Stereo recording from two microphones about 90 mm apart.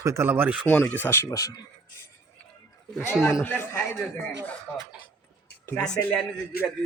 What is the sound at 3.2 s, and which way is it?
Speech, 30° left (ahead or behind).